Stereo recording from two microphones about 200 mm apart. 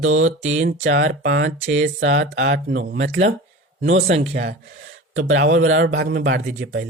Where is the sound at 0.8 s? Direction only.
65° right (ahead or behind).